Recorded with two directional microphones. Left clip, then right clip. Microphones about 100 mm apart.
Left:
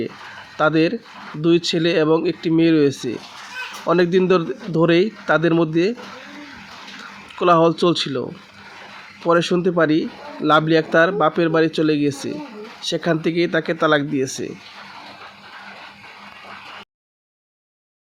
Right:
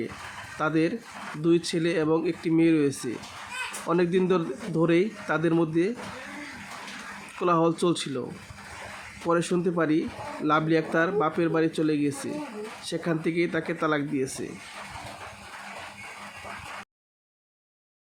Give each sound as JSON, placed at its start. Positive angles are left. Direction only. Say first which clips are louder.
{"t": 0.6, "sound": "a man's voice", "louder": "left 9 dB", "side_deg": 25}
{"t": 7.3, "sound": "speech", "louder": "left 9 dB", "side_deg": 30}
{"t": 9.2, "sound": "speech", "louder": "left 8 dB", "side_deg": 25}